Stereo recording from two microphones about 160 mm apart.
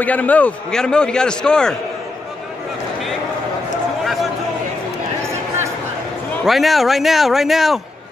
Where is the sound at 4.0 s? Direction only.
Centre (ahead or behind).